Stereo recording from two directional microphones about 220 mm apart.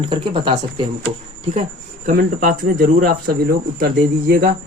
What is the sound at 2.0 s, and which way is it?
Speech, 40° right (ahead or behind).